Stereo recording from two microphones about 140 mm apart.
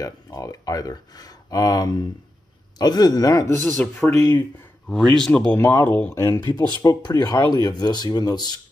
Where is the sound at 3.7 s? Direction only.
10° left (ahead or behind).